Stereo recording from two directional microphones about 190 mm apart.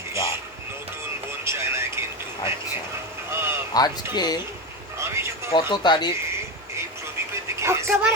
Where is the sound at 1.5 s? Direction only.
15° right (ahead or behind).